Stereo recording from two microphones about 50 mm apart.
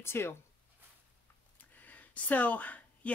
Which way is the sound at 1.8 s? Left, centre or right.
Left.